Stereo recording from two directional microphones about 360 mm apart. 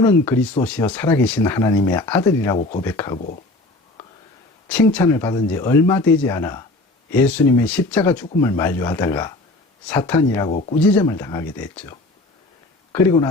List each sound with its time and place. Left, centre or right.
0.0 s speech: centre
2.6 s speech: centre
2.8 s speech: centre
4.7 s speech: centre